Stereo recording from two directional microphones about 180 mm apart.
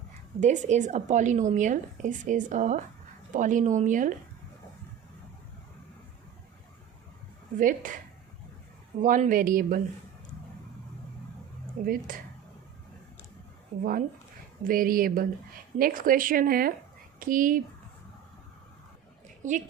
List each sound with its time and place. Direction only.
0.3 s a woman's voice: 40° right (ahead or behind)
7.6 s a woman's voice: 50° right (ahead or behind)
9.0 s a woman's voice: 45° right (ahead or behind)
11.9 s a woman's voice: 50° right (ahead or behind)
14.6 s a woman's voice: 50° right (ahead or behind)
19.4 s a woman's voice: 45° right (ahead or behind)